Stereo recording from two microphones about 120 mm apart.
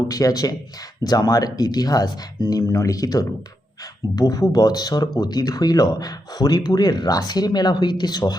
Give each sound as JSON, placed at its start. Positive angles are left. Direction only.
{"t": 0.1, "sound": "speech", "side_deg": 30}